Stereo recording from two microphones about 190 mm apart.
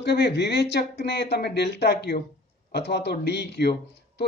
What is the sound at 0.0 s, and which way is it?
Speech, 65° left (ahead or behind).